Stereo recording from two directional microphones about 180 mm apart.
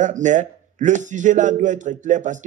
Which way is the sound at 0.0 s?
45° right (ahead or behind).